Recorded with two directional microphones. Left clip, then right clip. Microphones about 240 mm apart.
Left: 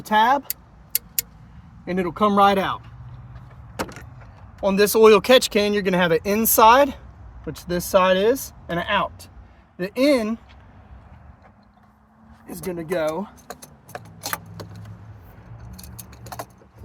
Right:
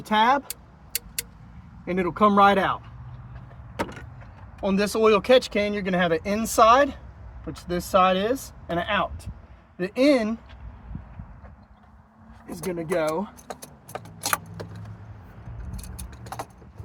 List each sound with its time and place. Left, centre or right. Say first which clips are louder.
0.0 s speech: left 3 dB; left
1.8 s speech: even; left
4.6 s speech: left 7 dB; left
12.6 s speech: left 1 dB; left
15.7 s keys jangling: left 1 dB; centre